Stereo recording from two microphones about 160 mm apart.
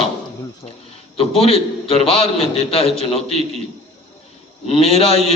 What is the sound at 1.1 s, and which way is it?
A man's voice, 35° left (ahead or behind).